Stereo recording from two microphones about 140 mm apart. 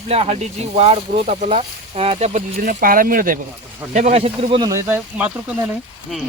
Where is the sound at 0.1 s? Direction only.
45° right (ahead or behind).